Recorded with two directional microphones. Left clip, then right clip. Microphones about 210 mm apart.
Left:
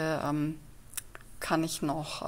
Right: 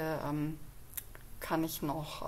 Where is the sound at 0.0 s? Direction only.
20° left (ahead or behind).